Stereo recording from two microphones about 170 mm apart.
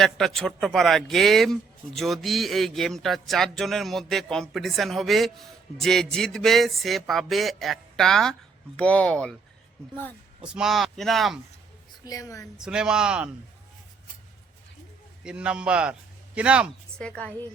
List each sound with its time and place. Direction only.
0.0 s a man's voice: centre (ahead or behind)
10.5 s a man's voice: centre (ahead or behind)
12.0 s a woman's voice: 20° left (ahead or behind)
12.5 s a man's voice: 5° right (ahead or behind)
15.2 s a man's voice: 5° right (ahead or behind)
17.0 s a woman's voice: 5° left (ahead or behind)